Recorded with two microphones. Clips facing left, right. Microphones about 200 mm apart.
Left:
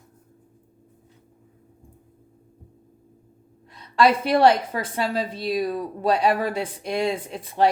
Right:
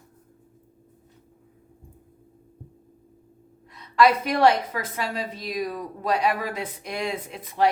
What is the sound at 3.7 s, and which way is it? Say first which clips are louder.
A woman's voice: even; 30° left (ahead or behind).